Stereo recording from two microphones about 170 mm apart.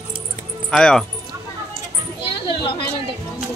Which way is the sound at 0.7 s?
5° left (ahead or behind).